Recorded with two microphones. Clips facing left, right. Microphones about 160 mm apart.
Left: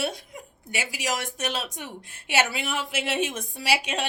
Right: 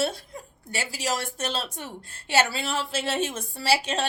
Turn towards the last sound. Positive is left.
turn(degrees=15)  # may be behind; listen again after turning